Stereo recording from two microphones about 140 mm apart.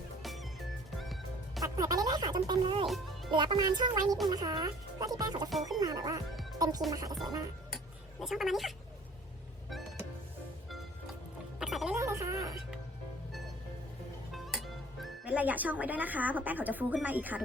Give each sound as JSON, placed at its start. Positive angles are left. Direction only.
{"t": 0.2, "sound": "music", "side_deg": 0}
{"t": 1.6, "sound": "music", "side_deg": -25}
{"t": 2.8, "sound": "a child's voice", "side_deg": 0}
{"t": 3.3, "sound": "speech", "side_deg": -30}
{"t": 8.2, "sound": "speech", "side_deg": 0}
{"t": 10.7, "sound": "music", "side_deg": 0}
{"t": 11.9, "sound": "music", "side_deg": -20}
{"t": 14.3, "sound": "speech", "side_deg": 0}